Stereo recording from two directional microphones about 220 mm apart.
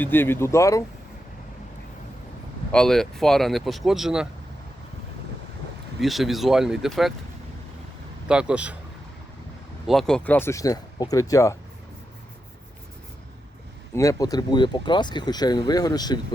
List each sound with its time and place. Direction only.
0.0 s speech: 10° left (ahead or behind)
2.7 s speech: centre (ahead or behind)
6.0 s speech: centre (ahead or behind)
8.3 s speech: 5° right (ahead or behind)
9.8 s speech: centre (ahead or behind)
13.9 s speech: 15° left (ahead or behind)